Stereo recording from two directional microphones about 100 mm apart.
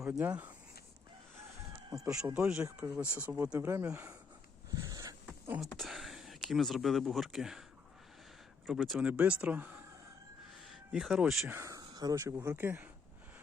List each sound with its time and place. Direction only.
0.0 s speech: 15° right (ahead or behind)
2.2 s speech: 10° right (ahead or behind)
2.6 s speech: 25° right (ahead or behind)
4.7 s a sound: 35° right (ahead or behind)
5.7 s speech: centre (ahead or behind)
8.6 s speech: centre (ahead or behind)
9.0 s speech: 15° right (ahead or behind)
10.7 s speech: 5° right (ahead or behind)
11.6 s speech: 35° right (ahead or behind); by 12.9 s 20° right (ahead or behind)